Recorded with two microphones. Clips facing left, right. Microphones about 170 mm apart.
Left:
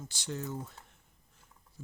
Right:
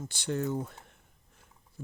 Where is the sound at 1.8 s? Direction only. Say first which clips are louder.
Right 6 dB; 60° right (ahead or behind).